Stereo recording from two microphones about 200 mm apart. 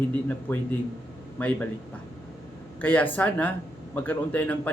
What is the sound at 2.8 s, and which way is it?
A man's voice, 5° left (ahead or behind).